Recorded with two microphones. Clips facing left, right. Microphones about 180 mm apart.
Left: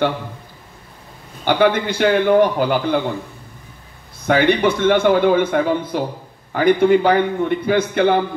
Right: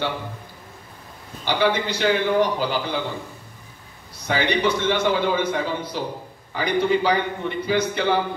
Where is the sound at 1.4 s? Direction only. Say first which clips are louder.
Left 6 dB; 55° left (ahead or behind).